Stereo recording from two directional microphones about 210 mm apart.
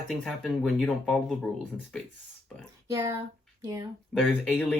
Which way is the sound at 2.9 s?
15° right (ahead or behind).